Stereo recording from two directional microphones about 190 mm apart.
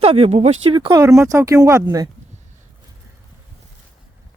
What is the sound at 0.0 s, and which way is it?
Speech, 30° right (ahead or behind).